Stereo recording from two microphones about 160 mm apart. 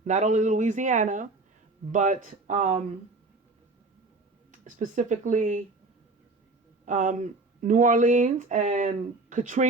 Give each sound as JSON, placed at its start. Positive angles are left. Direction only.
{"t": 0.0, "sound": "speech", "side_deg": -45}
{"t": 4.6, "sound": "speech", "side_deg": -50}
{"t": 6.8, "sound": "speech", "side_deg": -50}